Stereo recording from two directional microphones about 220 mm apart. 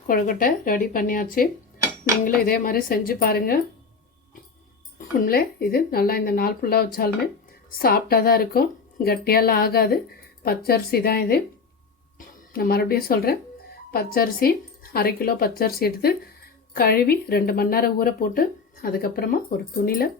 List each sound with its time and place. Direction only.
0.1 s speech: 40° left (ahead or behind)
4.9 s speech: 40° left (ahead or behind)
12.5 s speech: 45° left (ahead or behind)